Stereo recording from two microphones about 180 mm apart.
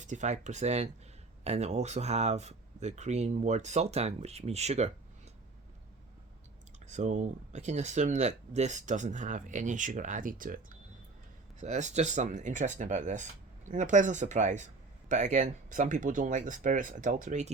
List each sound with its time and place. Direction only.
0.0 s speech: 40° right (ahead or behind)
6.8 s speech: 40° right (ahead or behind)
11.6 s speech: 40° right (ahead or behind)